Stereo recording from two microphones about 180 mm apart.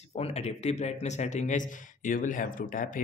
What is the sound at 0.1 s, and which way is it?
A man's voice, 35° left (ahead or behind).